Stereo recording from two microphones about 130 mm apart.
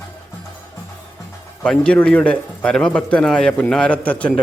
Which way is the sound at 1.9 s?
10° left (ahead or behind).